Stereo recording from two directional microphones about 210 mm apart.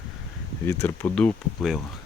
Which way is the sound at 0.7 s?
10° left (ahead or behind).